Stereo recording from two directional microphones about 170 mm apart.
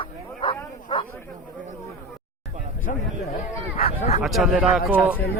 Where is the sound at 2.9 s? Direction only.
55° left (ahead or behind).